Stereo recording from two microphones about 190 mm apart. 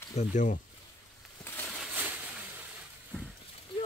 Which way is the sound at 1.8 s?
5° right (ahead or behind).